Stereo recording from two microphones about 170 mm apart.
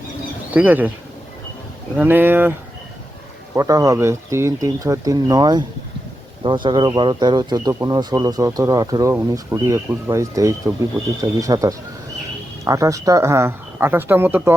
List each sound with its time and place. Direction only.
0.5 s speech: 10° right (ahead or behind)
2.0 s speech: 10° right (ahead or behind)